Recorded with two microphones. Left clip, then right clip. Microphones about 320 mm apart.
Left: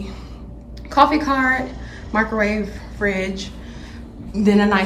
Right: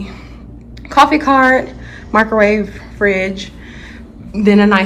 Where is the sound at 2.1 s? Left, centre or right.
Centre.